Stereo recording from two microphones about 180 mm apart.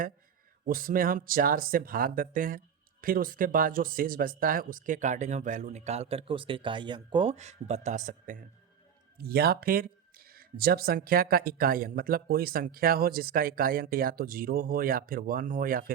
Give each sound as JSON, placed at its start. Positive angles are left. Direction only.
{"t": 0.6, "sound": "speech", "side_deg": -50}
{"t": 9.1, "sound": "speech", "side_deg": -60}